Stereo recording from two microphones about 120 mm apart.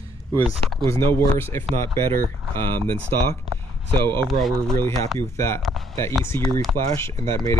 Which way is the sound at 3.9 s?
20° left (ahead or behind).